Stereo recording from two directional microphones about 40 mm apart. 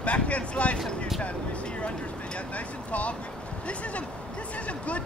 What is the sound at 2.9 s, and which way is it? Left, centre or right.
Speech, left.